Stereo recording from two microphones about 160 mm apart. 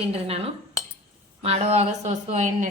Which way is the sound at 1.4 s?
40° right (ahead or behind).